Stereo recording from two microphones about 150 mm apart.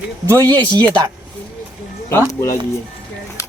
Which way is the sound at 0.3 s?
25° right (ahead or behind).